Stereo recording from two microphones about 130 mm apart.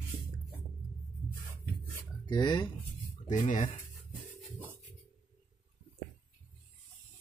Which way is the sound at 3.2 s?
75° left (ahead or behind).